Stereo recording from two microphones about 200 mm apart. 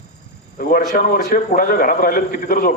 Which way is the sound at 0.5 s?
45° left (ahead or behind).